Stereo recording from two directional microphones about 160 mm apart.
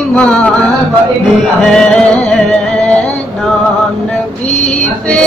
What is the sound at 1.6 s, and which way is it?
Music, 5° left (ahead or behind).